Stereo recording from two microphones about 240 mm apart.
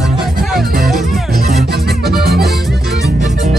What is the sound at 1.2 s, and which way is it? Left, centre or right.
Music, right.